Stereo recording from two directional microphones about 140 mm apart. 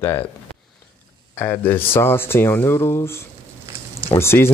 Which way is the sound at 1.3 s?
15° left (ahead or behind).